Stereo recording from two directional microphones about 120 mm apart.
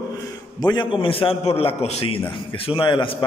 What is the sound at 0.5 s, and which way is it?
A man's voice, 35° left (ahead or behind).